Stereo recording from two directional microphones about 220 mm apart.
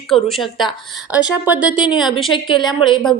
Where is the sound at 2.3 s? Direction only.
20° left (ahead or behind).